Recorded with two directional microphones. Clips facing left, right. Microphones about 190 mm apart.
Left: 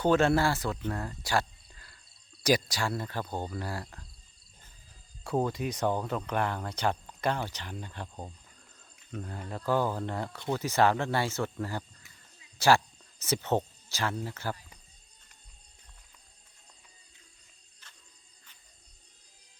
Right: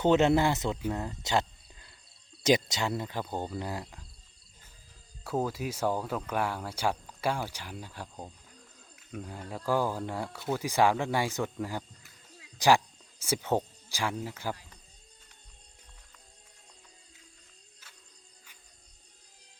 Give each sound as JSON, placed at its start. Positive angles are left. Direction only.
{"t": 0.0, "sound": "speech", "side_deg": -20}
{"t": 0.9, "sound": "cricket", "side_deg": -20}
{"t": 2.4, "sound": "speech", "side_deg": -20}
{"t": 5.2, "sound": "speech", "side_deg": -5}
{"t": 17.8, "sound": "music", "side_deg": -5}